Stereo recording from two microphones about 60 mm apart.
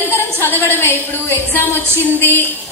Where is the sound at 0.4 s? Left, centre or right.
Left.